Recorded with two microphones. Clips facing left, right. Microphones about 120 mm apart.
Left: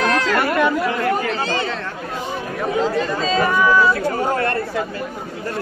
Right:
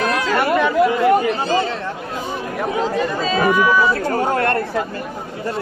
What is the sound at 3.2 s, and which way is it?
Speech, 10° right (ahead or behind).